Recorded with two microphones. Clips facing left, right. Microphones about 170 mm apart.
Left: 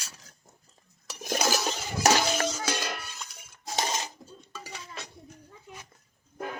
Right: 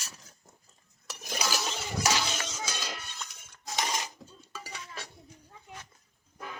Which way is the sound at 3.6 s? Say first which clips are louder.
Left 2 dB; 30° left (ahead or behind).